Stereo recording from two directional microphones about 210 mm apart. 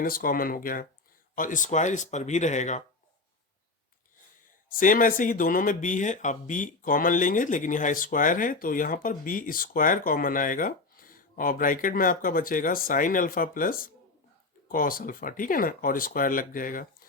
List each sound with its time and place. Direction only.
0.0 s speech: 40° left (ahead or behind)
4.8 s speech: 40° left (ahead or behind)